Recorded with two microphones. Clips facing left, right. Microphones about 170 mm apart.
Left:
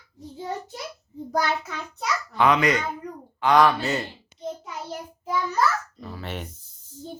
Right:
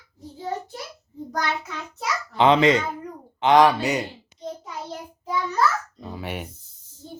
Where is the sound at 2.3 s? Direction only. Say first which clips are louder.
Right 4 dB; 25° right (ahead or behind).